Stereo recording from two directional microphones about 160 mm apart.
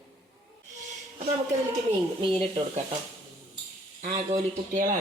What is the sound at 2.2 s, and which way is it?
Speech, 30° right (ahead or behind).